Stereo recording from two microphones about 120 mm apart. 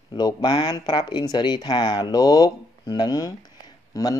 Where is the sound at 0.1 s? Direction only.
40° left (ahead or behind).